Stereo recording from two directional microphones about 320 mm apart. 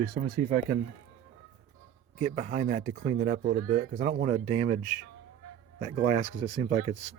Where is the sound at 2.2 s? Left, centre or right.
Right.